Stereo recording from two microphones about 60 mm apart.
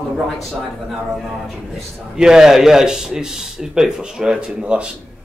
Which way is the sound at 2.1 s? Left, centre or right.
Centre.